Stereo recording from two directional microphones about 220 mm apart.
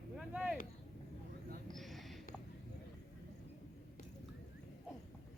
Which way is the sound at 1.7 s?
Centre (ahead or behind).